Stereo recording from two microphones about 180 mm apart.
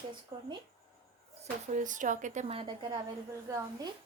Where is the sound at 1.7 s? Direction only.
45° right (ahead or behind).